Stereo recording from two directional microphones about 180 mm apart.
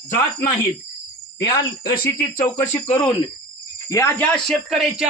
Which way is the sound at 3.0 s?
25° left (ahead or behind).